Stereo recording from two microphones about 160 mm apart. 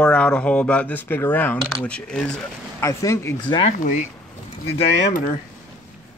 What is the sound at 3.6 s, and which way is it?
Speech, 50° left (ahead or behind).